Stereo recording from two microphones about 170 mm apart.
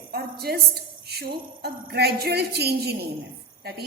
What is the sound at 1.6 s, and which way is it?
A woman's voice, 70° right (ahead or behind).